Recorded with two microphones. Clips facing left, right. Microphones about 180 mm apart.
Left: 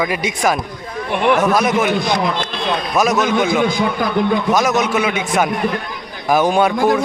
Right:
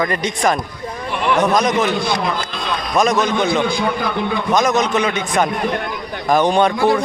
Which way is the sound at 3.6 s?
45° left (ahead or behind).